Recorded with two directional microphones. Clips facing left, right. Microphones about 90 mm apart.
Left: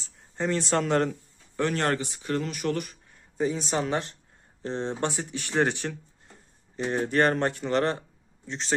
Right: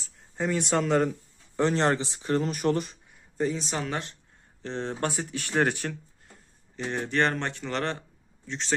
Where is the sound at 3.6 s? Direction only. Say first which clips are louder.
Left 4 dB; 35° left (ahead or behind).